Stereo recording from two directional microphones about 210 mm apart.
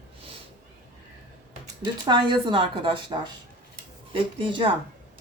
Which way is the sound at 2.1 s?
20° right (ahead or behind).